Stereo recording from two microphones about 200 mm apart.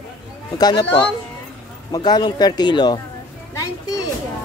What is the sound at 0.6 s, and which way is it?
Speech, 20° left (ahead or behind).